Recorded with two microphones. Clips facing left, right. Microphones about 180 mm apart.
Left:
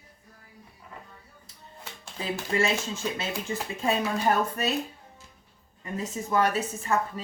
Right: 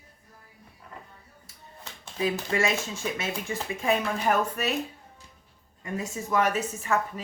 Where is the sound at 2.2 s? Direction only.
30° left (ahead or behind).